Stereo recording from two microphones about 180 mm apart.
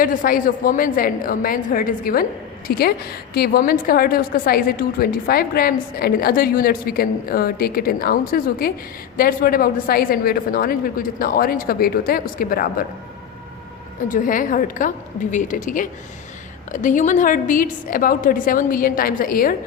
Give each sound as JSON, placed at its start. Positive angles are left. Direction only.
{"t": 0.0, "sound": "a woman's voice", "side_deg": 50}
{"t": 14.1, "sound": "a woman's voice", "side_deg": 50}